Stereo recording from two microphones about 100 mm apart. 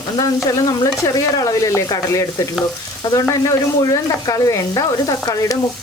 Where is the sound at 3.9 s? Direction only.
35° left (ahead or behind).